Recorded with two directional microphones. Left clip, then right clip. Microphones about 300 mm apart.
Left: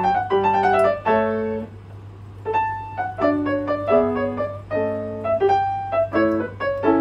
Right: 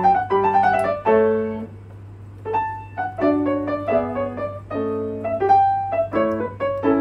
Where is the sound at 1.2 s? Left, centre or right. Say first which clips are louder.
Right 3 dB; left.